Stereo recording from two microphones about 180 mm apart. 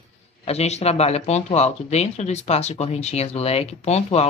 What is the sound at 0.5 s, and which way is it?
Speech, 35° left (ahead or behind).